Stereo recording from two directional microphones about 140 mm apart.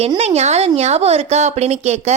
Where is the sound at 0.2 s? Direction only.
50° right (ahead or behind).